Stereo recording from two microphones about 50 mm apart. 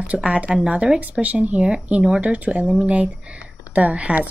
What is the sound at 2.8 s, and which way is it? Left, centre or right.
Speech, centre.